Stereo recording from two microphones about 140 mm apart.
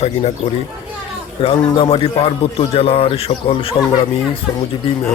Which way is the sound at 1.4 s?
40° left (ahead or behind).